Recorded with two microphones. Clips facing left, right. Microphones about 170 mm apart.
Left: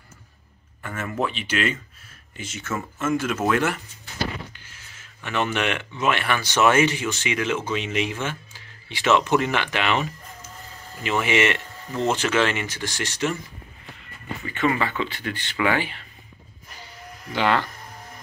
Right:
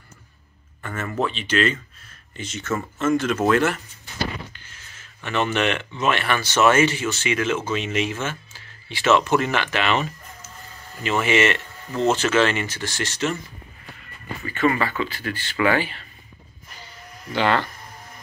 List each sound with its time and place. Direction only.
0.8 s speech: 10° left (ahead or behind)
14.5 s speech: 20° left (ahead or behind)
17.3 s speech: 10° left (ahead or behind)